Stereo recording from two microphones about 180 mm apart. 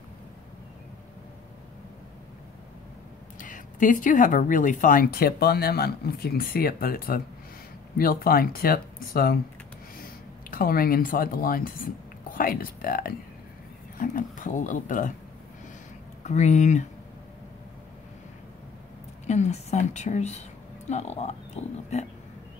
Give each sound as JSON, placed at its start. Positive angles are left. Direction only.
{"t": 3.3, "sound": "speech", "side_deg": 45}
{"t": 10.5, "sound": "speech", "side_deg": 55}
{"t": 16.3, "sound": "speech", "side_deg": 40}
{"t": 19.2, "sound": "speech", "side_deg": 40}